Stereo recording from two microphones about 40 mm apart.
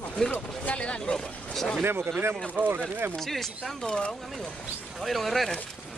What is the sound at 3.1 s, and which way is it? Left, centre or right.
Speech, centre.